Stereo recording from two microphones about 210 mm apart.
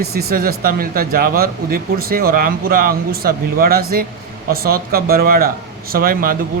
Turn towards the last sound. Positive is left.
turn(degrees=-45)  # may be behind; listen again after turning